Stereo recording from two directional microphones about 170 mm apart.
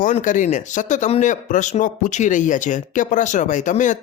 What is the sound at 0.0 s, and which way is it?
Speech, 50° left (ahead or behind).